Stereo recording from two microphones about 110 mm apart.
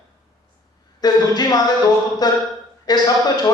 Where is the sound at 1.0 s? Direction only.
35° left (ahead or behind).